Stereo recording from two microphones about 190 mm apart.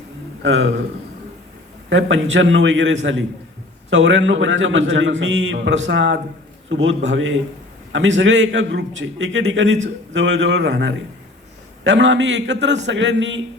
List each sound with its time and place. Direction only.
0.4 s a man's voice: 70° right (ahead or behind)
1.9 s a man's voice: 75° right (ahead or behind)